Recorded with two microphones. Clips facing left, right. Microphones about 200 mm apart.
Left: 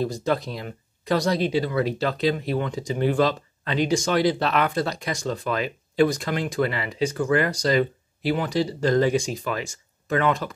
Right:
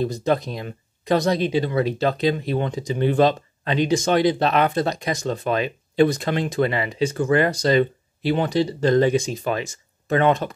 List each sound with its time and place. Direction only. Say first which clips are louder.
0.0 s speech: right 3 dB; 20° right (ahead or behind)